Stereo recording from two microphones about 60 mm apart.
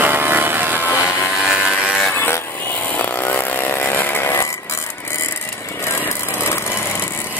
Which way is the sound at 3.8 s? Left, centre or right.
Left.